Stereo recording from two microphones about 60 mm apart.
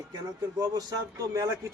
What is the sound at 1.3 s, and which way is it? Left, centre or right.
Speech, right.